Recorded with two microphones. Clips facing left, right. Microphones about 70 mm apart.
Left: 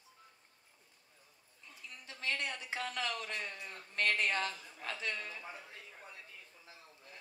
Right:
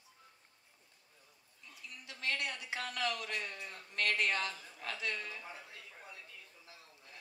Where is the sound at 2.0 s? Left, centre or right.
Left.